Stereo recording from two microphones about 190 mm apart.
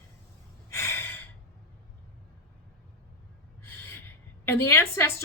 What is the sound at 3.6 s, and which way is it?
Gasp, 10° left (ahead or behind).